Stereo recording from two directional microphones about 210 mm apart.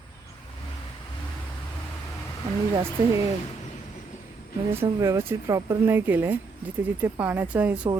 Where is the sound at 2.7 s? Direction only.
20° right (ahead or behind).